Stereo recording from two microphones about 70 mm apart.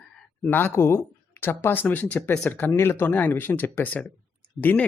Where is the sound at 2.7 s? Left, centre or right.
Left.